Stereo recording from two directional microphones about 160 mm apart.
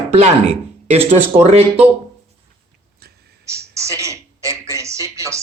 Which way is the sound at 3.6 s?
20° right (ahead or behind).